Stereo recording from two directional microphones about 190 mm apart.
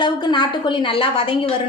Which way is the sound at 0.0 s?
25° left (ahead or behind).